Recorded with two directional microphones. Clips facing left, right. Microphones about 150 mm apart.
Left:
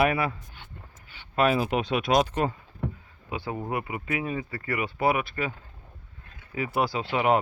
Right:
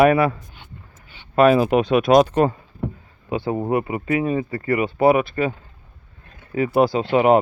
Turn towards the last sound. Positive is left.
turn(degrees=-25)  # may be behind; listen again after turning